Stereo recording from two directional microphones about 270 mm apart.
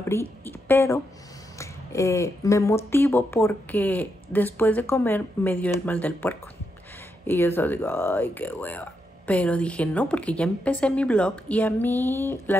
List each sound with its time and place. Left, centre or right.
0.0 s speech: centre